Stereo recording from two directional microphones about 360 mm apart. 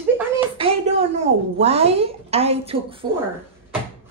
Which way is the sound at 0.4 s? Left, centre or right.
Centre.